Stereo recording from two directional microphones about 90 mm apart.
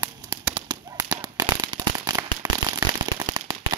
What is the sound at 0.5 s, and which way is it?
Firecracker, 55° right (ahead or behind).